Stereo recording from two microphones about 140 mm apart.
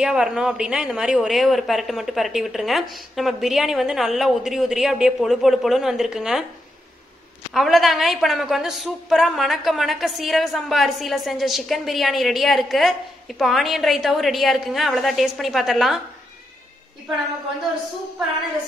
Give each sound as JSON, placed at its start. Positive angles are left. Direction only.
{"t": 0.0, "sound": "a woman's voice", "side_deg": -5}
{"t": 7.5, "sound": "a woman's voice", "side_deg": 0}